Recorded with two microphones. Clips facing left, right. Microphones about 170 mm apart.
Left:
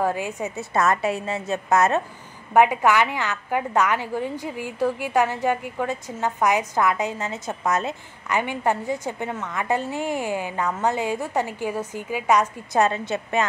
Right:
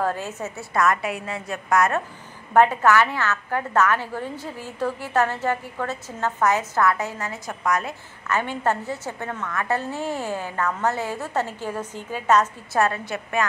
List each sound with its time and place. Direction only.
0.0 s a woman's voice: 15° left (ahead or behind)